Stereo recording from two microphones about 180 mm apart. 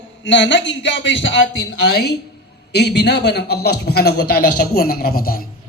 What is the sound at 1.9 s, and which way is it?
A man's voice, 65° left (ahead or behind).